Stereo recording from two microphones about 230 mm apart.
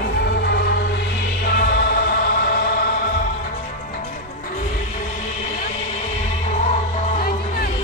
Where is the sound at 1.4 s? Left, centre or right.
Left.